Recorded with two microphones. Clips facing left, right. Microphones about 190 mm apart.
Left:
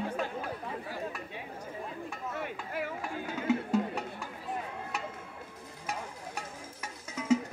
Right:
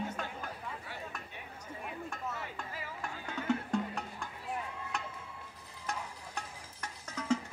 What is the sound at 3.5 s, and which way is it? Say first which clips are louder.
Music: left 4 dB; 5° left (ahead or behind).